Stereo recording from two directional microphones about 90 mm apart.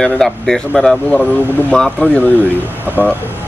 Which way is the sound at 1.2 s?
20° left (ahead or behind).